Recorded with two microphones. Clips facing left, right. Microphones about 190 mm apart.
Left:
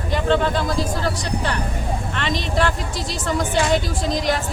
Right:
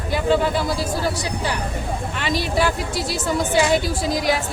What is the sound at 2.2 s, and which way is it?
A woman's voice, 5° right (ahead or behind).